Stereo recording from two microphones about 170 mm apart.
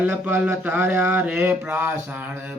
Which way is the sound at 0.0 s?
10° right (ahead or behind).